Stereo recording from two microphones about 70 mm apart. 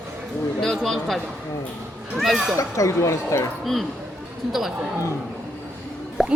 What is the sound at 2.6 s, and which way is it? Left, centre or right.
Speech, left.